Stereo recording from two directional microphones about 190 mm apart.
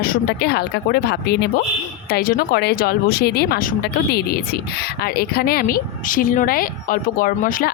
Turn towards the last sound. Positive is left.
turn(degrees=45)  # may be behind; listen again after turning